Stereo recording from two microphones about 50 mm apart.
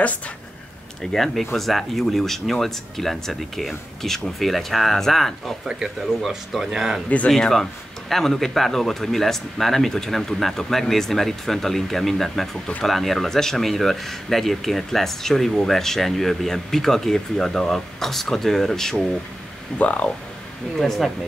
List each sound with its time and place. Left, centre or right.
1.1 s speech: centre
5.7 s speech: centre
7.2 s speech: centre
19.8 s speech: left
20.7 s speech: centre